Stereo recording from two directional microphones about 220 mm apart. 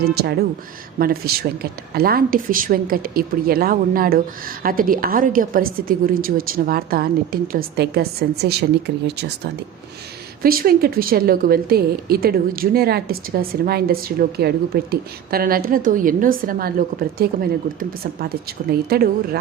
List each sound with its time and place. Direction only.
0.0 s a woman's voice: 45° right (ahead or behind)